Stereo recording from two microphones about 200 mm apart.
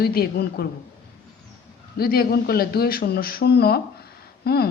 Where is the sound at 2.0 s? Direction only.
50° left (ahead or behind).